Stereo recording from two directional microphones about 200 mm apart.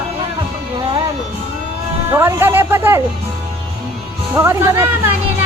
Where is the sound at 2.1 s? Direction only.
10° right (ahead or behind).